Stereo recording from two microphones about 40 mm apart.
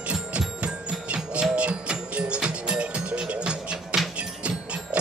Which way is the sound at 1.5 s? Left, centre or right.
Right.